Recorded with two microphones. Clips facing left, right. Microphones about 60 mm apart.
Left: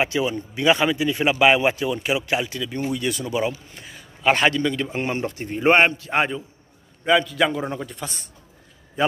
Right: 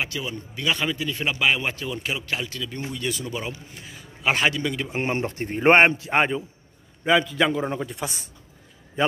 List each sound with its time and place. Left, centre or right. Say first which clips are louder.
0.0 s speech: left 7 dB; centre
4.9 s a man's voice: even; right
6.0 s a man's voice: right 1 dB; centre